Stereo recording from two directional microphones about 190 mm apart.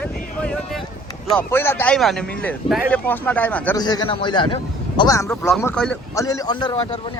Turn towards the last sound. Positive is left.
turn(degrees=25)  # may be behind; listen again after turning